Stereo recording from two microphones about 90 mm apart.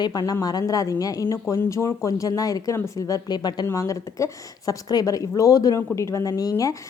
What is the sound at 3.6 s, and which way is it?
A woman's voice, 35° left (ahead or behind).